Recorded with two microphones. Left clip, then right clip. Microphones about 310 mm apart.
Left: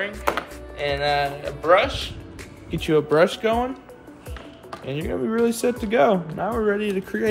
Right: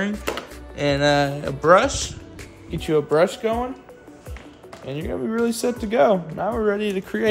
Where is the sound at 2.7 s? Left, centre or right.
Centre.